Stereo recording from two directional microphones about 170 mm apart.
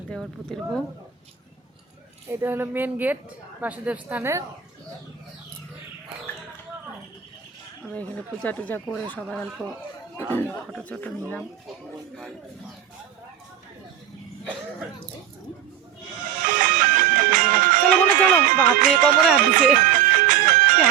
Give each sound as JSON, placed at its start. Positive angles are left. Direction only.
{"t": 0.1, "sound": "speech", "side_deg": 5}
{"t": 2.3, "sound": "speech", "side_deg": -15}
{"t": 8.4, "sound": "speech", "side_deg": 10}
{"t": 16.2, "sound": "music", "side_deg": -50}
{"t": 19.2, "sound": "speech", "side_deg": -5}
{"t": 19.8, "sound": "music", "side_deg": -50}